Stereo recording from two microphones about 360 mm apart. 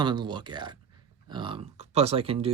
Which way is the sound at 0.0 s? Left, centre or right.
Centre.